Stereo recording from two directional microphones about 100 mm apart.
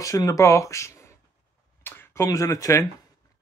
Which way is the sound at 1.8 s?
20° left (ahead or behind).